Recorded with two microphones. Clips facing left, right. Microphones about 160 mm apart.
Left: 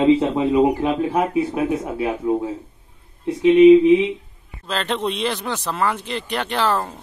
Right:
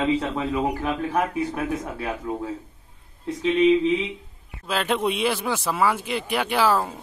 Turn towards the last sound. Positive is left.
turn(degrees=-10)  # may be behind; listen again after turning